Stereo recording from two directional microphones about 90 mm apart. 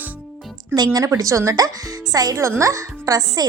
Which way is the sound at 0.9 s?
40° right (ahead or behind).